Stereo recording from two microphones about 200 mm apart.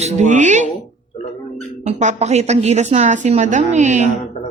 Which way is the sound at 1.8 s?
35° right (ahead or behind).